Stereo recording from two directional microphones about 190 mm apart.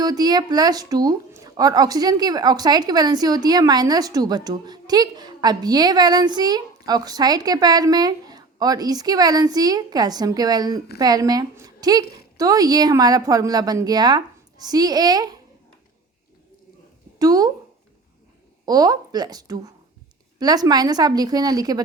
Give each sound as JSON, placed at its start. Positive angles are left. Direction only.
{"t": 0.0, "sound": "speech", "side_deg": -20}
{"t": 17.2, "sound": "speech", "side_deg": -20}
{"t": 18.6, "sound": "speech", "side_deg": -20}